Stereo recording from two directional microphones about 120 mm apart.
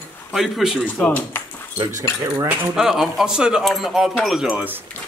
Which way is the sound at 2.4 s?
5° right (ahead or behind).